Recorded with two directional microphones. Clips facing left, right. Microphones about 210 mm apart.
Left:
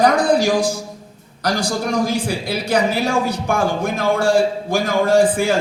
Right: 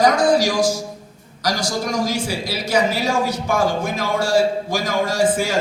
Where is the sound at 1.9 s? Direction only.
55° left (ahead or behind).